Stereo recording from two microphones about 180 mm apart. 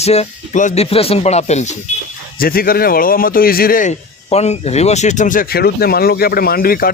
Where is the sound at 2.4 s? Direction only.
55° left (ahead or behind).